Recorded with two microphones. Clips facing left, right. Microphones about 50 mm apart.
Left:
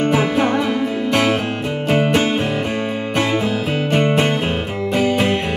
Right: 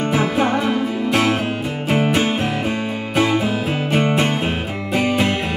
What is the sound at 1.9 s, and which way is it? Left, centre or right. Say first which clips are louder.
Music: left 1 dB; centre.